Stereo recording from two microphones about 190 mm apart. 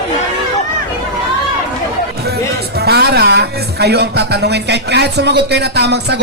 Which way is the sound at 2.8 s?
55° right (ahead or behind).